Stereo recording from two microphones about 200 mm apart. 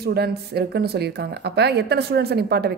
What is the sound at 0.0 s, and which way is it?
A woman's voice, 55° right (ahead or behind).